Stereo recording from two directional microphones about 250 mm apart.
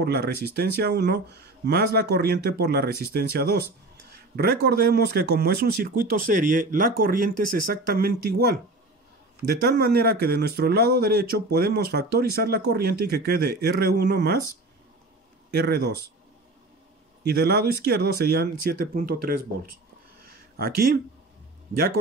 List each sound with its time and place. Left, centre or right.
0.0 s speech: right
4.4 s speech: right
15.5 s speech: right
17.2 s speech: right
20.2 s a sound: right